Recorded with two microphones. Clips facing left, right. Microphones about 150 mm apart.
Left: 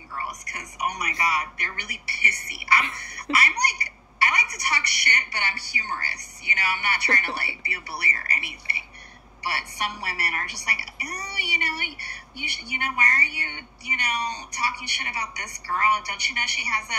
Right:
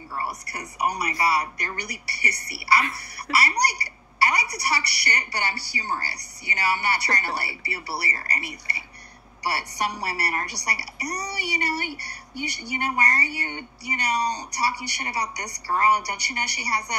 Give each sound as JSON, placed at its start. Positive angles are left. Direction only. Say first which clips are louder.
{"t": 0.1, "sound": "a woman's voice", "louder": "right 3 dB", "side_deg": -35}